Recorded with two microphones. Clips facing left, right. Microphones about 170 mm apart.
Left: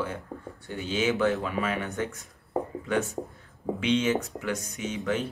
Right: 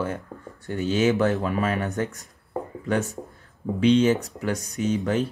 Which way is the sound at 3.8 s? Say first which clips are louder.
Right 7 dB; 35° right (ahead or behind).